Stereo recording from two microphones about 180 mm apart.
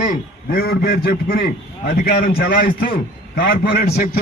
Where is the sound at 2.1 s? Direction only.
65° left (ahead or behind).